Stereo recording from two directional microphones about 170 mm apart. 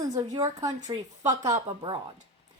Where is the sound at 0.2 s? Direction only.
20° right (ahead or behind).